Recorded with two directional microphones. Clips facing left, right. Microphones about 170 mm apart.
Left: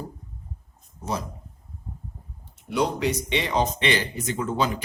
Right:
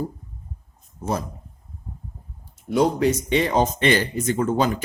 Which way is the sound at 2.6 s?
45° right (ahead or behind).